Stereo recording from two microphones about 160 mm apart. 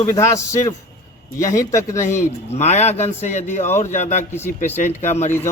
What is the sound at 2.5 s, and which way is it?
A man's voice, 45° left (ahead or behind).